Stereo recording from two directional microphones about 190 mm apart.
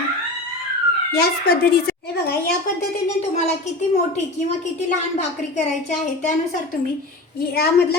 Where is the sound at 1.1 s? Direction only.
55° left (ahead or behind).